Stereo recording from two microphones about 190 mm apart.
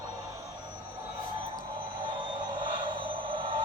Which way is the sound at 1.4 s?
25° right (ahead or behind).